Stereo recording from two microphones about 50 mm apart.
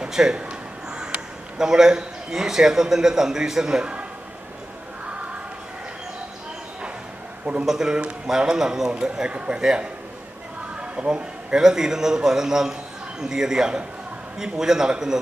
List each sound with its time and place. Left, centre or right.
0.0 s a man's voice: centre
7.6 s a man's voice: centre
10.8 s a sound: right
11.5 s a man's voice: centre